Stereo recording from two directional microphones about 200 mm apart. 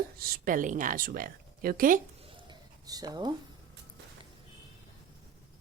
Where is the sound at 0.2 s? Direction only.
45° right (ahead or behind).